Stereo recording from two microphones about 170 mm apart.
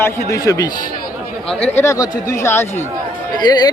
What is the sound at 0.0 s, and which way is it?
Speech, 20° left (ahead or behind).